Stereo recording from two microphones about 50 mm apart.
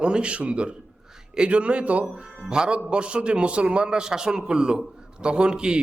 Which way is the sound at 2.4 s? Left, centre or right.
Centre.